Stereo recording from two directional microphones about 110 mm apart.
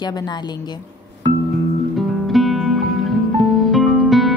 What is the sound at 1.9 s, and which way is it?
Music, centre (ahead or behind).